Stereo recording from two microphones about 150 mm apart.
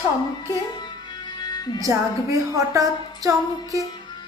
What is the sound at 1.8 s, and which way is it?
A woman's voice, 20° right (ahead or behind).